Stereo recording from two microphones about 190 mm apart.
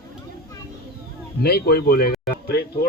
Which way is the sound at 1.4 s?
55° left (ahead or behind).